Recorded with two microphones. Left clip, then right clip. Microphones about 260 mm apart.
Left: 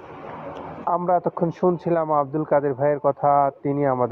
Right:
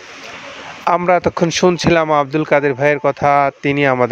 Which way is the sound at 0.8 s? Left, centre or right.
Right.